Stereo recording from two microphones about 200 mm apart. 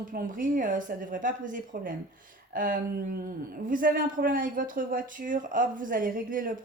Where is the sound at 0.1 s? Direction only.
45° right (ahead or behind).